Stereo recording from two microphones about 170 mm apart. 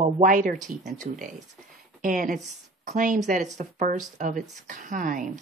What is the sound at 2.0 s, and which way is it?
A woman's voice, 50° right (ahead or behind).